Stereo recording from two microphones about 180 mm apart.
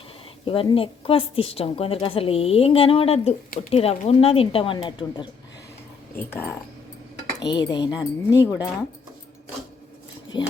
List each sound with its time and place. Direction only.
0.4 s a woman's voice: 30° left (ahead or behind)
6.1 s speech: 10° left (ahead or behind)
10.3 s speech: 25° left (ahead or behind)